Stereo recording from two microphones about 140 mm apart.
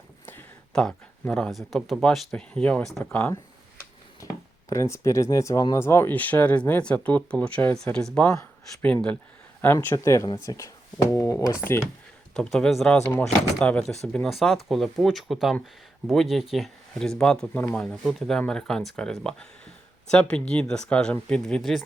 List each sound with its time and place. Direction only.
0.3 s speech: 10° left (ahead or behind)
4.2 s a sound: 25° left (ahead or behind)
4.7 s speech: 20° left (ahead or behind)
9.6 s speech: 15° left (ahead or behind)
12.3 s speech: 5° left (ahead or behind)